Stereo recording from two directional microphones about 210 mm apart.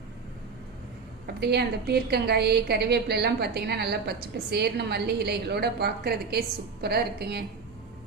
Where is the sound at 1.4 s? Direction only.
50° right (ahead or behind).